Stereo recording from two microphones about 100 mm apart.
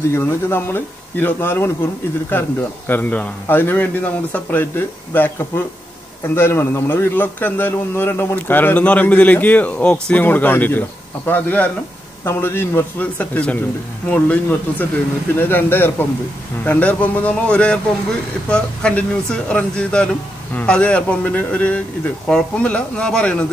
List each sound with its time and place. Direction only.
0.1 s a man's voice: 20° left (ahead or behind)